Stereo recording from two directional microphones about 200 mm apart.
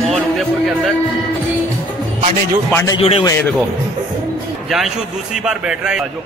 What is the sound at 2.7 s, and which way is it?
Speech, 15° left (ahead or behind).